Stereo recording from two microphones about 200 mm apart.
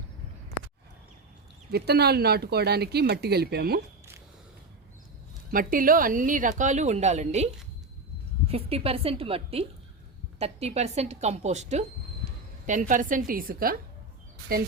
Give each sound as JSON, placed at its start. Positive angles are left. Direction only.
{"t": 1.7, "sound": "speech", "side_deg": -55}
{"t": 5.5, "sound": "a woman's voice", "side_deg": -45}
{"t": 12.9, "sound": "speech", "side_deg": -40}